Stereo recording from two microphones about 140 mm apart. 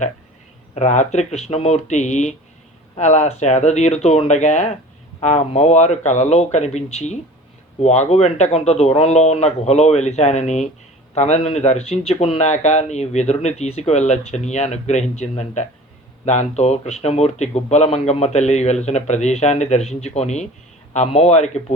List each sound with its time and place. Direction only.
0.8 s speech: 55° left (ahead or behind)